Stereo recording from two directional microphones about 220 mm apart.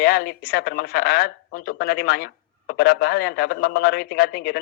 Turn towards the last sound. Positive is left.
turn(degrees=45)  # may be behind; listen again after turning